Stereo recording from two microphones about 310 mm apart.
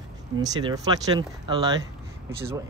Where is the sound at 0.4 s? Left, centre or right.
Centre.